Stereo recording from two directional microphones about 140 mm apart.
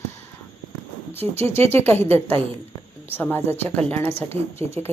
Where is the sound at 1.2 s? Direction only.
15° left (ahead or behind).